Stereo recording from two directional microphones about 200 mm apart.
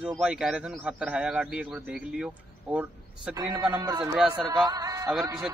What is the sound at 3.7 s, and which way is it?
Speech, 20° right (ahead or behind).